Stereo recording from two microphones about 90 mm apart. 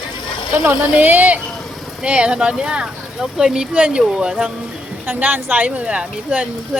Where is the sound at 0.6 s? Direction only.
20° right (ahead or behind).